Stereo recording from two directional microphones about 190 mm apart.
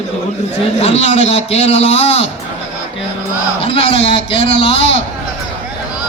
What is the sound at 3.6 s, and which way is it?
A man's voice, 30° left (ahead or behind).